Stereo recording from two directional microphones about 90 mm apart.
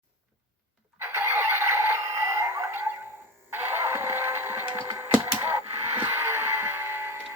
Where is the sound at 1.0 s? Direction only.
30° right (ahead or behind).